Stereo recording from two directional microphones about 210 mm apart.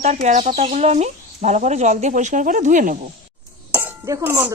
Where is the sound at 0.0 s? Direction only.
35° right (ahead or behind).